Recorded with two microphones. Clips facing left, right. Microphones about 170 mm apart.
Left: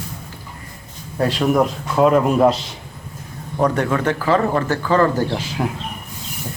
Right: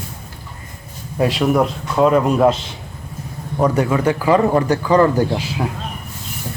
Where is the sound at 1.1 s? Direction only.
10° right (ahead or behind).